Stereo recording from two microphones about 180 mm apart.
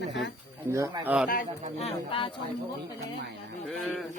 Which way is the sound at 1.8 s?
30° left (ahead or behind).